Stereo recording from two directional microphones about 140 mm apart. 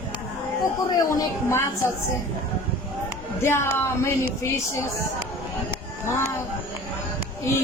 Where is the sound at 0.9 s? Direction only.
25° left (ahead or behind).